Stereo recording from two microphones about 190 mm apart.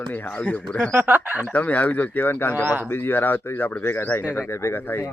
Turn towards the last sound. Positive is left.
turn(degrees=15)  # may be behind; listen again after turning